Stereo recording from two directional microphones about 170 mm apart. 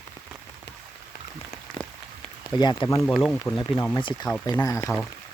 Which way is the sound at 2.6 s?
25° left (ahead or behind).